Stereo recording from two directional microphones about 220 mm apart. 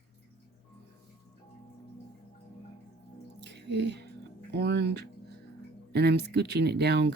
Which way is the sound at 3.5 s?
50° right (ahead or behind).